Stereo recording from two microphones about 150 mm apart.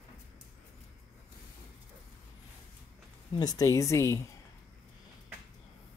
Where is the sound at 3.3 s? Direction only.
25° left (ahead or behind).